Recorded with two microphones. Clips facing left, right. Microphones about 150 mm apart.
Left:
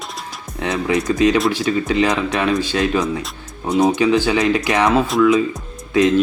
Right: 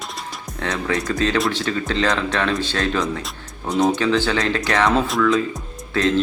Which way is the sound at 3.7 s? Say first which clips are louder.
Left 3 dB; centre (ahead or behind).